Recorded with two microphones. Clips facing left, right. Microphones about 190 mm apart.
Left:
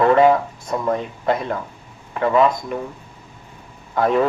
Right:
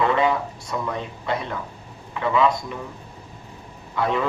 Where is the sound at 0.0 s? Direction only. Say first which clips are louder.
Left 7 dB; 45° left (ahead or behind).